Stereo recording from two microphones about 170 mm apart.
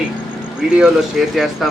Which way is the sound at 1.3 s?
Centre (ahead or behind).